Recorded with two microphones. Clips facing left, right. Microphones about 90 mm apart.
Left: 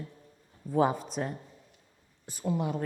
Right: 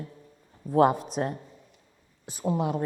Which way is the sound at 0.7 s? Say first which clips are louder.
Right 5 dB; 70° right (ahead or behind).